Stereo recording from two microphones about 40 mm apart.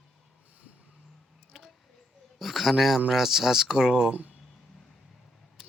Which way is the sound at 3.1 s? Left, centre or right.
Centre.